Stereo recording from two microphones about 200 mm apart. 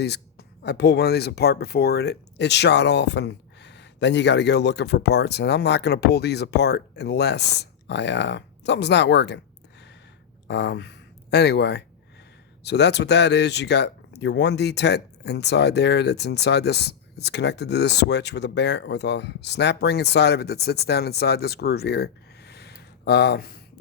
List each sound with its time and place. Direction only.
0.0 s speech: 55° left (ahead or behind)
10.5 s speech: 60° left (ahead or behind)